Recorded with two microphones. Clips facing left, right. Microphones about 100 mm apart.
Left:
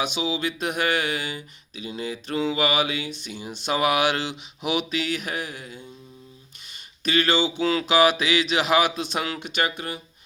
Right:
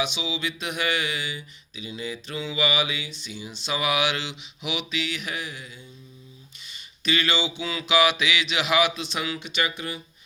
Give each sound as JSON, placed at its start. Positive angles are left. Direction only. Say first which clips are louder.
{"t": 0.0, "sound": "speech", "louder": "left 3 dB", "side_deg": 45}